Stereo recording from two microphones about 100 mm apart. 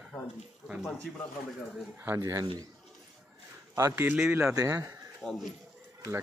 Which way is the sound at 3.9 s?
15° right (ahead or behind).